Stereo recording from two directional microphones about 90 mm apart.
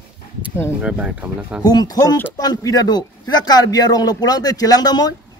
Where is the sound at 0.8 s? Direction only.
15° right (ahead or behind).